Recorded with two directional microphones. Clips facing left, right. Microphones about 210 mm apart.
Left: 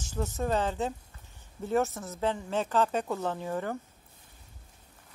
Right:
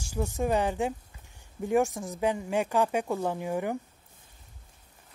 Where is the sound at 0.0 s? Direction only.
10° right (ahead or behind).